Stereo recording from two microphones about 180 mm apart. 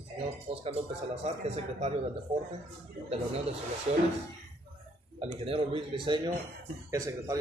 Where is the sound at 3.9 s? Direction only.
35° right (ahead or behind).